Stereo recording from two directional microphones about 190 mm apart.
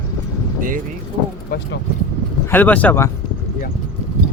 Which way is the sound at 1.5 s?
60° left (ahead or behind).